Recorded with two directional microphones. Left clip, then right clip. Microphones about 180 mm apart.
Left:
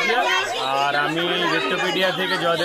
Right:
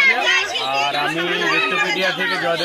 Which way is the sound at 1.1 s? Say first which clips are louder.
Right 2 dB; 35° left (ahead or behind).